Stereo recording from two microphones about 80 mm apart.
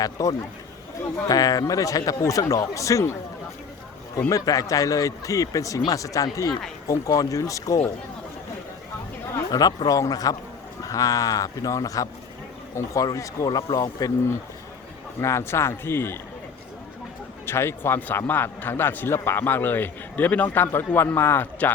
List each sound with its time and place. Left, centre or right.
0.0 s speech: left
4.3 s speech: left
9.5 s speech: left
15.2 s speech: left
17.4 s a man's voice: left